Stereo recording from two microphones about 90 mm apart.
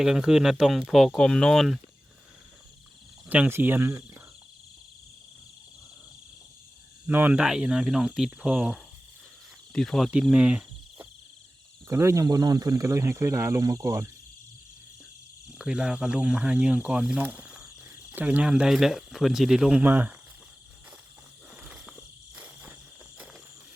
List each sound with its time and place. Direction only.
0.0 s speech: 5° right (ahead or behind)
3.2 s speech: 20° right (ahead or behind)
7.1 s speech: 20° right (ahead or behind)
7.3 s speech: 5° right (ahead or behind)
9.7 s speech: 5° left (ahead or behind)
10.3 s speech: 10° right (ahead or behind)
11.9 s speech: 30° right (ahead or behind)
12.2 s speech: 45° right (ahead or behind)
15.4 s speech: 10° right (ahead or behind)
17.2 s cricket: 15° right (ahead or behind)
18.1 s speech: 20° right (ahead or behind)
19.8 s speech: 20° right (ahead or behind)
21.5 s cricket: 10° right (ahead or behind)
22.4 s cricket: 15° right (ahead or behind)